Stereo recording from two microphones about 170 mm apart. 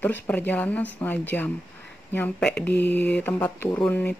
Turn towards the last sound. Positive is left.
turn(degrees=10)  # may be behind; listen again after turning